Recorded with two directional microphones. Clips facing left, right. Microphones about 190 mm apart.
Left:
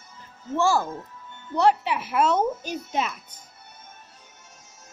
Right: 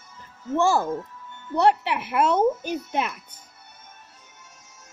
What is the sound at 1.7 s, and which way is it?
A child's voice, 60° right (ahead or behind).